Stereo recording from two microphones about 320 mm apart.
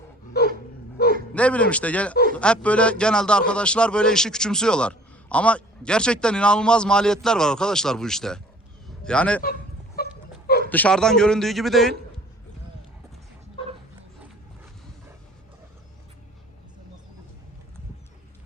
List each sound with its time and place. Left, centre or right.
0.4 s dog: left
1.3 s a man's voice: centre
9.4 s a sound: left
10.7 s a man's voice: centre